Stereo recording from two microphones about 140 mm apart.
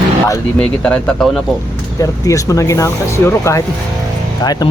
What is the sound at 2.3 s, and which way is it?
Speech, 25° left (ahead or behind).